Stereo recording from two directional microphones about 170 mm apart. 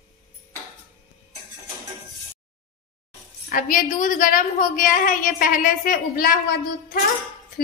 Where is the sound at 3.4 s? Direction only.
55° left (ahead or behind).